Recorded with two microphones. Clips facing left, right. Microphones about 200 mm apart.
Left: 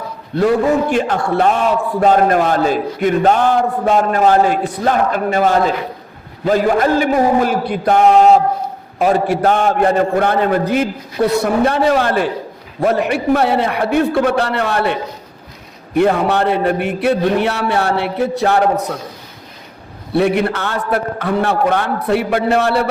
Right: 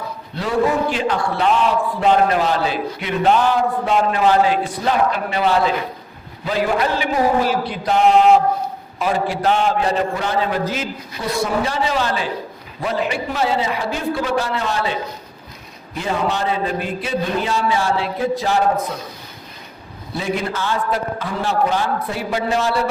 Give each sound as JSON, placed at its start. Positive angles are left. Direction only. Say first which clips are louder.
{"t": 0.3, "sound": "a man's voice", "louder": "left 5 dB", "side_deg": 50}
{"t": 16.0, "sound": "a man's voice", "louder": "left 8 dB", "side_deg": 60}
{"t": 20.1, "sound": "a man's voice", "louder": "left 8 dB", "side_deg": 65}